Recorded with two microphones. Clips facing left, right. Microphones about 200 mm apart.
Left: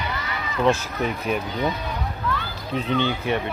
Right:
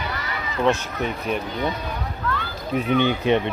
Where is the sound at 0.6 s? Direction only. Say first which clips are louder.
Even; centre (ahead or behind).